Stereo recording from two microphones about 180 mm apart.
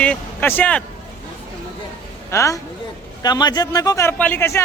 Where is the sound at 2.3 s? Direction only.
15° left (ahead or behind).